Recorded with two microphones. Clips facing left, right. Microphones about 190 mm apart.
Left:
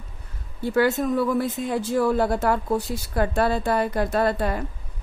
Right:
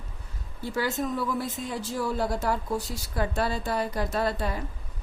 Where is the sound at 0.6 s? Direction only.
60° left (ahead or behind).